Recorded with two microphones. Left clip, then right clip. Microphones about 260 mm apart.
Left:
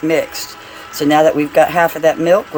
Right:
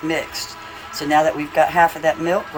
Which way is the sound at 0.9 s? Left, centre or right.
Left.